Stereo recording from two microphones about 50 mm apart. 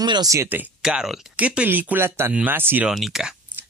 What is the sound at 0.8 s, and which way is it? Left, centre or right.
Speech, centre.